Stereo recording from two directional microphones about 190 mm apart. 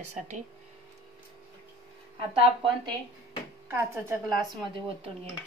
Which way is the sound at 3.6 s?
10° right (ahead or behind).